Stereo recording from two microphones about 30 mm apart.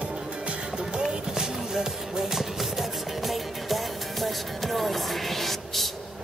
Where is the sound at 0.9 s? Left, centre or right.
Right.